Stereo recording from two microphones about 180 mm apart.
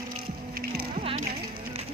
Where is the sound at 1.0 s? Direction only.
35° right (ahead or behind).